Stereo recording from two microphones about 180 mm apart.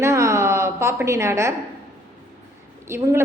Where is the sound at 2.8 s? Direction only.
15° right (ahead or behind).